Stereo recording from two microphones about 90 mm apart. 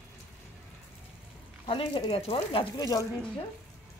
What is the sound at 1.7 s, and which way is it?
Speech, 75° left (ahead or behind).